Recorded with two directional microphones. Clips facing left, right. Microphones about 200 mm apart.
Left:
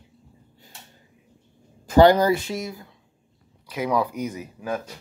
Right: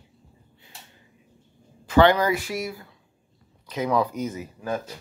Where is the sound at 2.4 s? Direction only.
25° left (ahead or behind).